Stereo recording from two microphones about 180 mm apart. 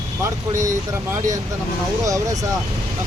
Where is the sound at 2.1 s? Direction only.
20° right (ahead or behind).